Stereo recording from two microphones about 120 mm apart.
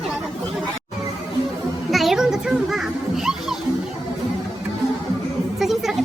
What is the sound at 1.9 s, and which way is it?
Music, centre (ahead or behind).